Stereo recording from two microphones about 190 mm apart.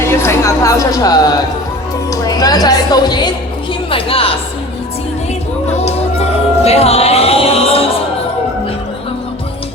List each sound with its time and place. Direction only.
0.1 s speech: 15° left (ahead or behind)
3.7 s music: 30° left (ahead or behind)
5.7 s music: 35° left (ahead or behind)